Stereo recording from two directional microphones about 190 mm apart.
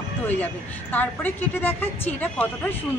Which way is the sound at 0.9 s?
10° left (ahead or behind).